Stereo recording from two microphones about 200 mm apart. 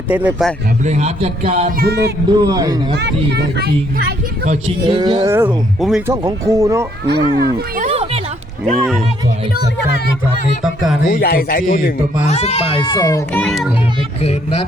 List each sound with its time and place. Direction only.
0.1 s speech: 5° right (ahead or behind)
0.9 s a man's voice: 35° right (ahead or behind)
1.8 s speech: 55° right (ahead or behind)
2.4 s a man's voice: 20° right (ahead or behind)
3.2 s a child's voice: 55° right (ahead or behind)
4.9 s a man's voice: 25° right (ahead or behind)
5.2 s speech: 10° right (ahead or behind)
6.1 s speech: 15° right (ahead or behind)
7.1 s speech: 50° right (ahead or behind)
7.9 s a sound: 30° right (ahead or behind)
11.0 s speech: 50° left (ahead or behind); by 13.2 s 20° left (ahead or behind)
13.3 s a child's voice: centre (ahead or behind)
14.2 s speech: 30° left (ahead or behind)